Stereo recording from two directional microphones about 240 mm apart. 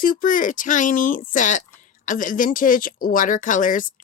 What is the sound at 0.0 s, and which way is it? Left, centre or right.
Speech, left.